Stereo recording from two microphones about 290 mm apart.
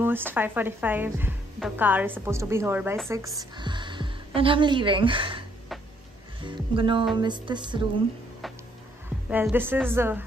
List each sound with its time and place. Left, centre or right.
0.0 s speech: centre
6.4 s speech: centre
9.3 s speech: centre